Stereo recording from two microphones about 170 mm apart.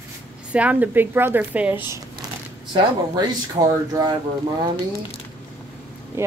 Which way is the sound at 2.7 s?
25° right (ahead or behind).